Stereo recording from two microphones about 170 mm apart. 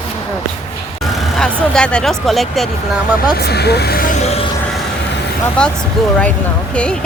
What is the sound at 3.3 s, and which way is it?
Speech, 70° left (ahead or behind).